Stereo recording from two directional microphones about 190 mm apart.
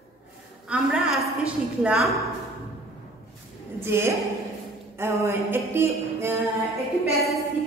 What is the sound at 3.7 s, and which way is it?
A woman's voice, 15° right (ahead or behind).